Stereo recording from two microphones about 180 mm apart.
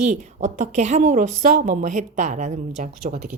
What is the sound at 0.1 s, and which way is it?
A woman's voice, 45° right (ahead or behind).